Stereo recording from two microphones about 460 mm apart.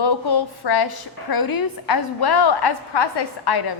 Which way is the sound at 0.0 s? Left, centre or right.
Left.